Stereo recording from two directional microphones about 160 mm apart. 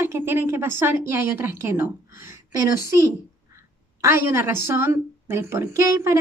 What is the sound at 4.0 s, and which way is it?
A woman's voice, 15° right (ahead or behind).